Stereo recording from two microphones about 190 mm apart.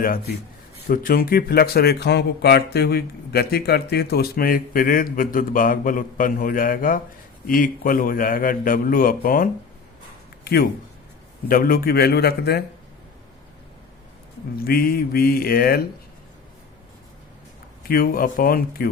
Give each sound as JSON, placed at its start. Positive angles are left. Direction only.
{"t": 0.9, "sound": "a man's voice", "side_deg": 50}
{"t": 14.6, "sound": "speech", "side_deg": 50}
{"t": 17.8, "sound": "speech", "side_deg": 50}